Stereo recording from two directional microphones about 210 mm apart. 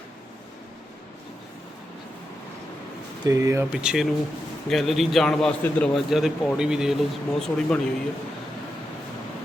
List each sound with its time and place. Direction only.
3.2 s speech: 15° right (ahead or behind)
3.7 s a man's voice: 5° right (ahead or behind)